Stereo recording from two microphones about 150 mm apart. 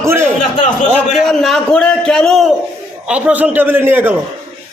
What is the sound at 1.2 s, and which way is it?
A man's voice, centre (ahead or behind).